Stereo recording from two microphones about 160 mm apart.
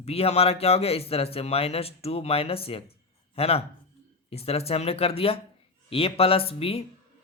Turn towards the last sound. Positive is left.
turn(degrees=35)  # may be behind; listen again after turning